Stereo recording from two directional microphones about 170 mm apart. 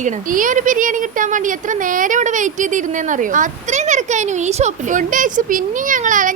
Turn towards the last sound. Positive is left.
turn(degrees=-50)  # may be behind; listen again after turning